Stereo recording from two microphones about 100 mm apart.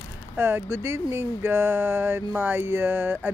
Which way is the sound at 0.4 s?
25° right (ahead or behind).